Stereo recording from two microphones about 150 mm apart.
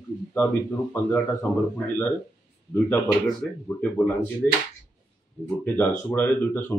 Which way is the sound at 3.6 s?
15° left (ahead or behind).